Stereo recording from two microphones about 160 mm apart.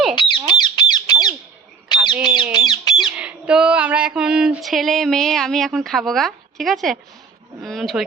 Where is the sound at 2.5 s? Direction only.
25° left (ahead or behind).